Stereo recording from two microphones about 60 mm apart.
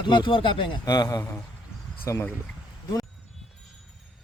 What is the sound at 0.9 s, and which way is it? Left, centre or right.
Speech, left.